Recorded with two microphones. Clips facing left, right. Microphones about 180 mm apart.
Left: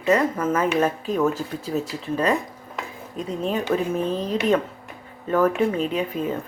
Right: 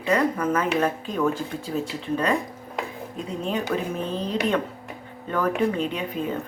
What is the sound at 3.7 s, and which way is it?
Speech, 15° left (ahead or behind).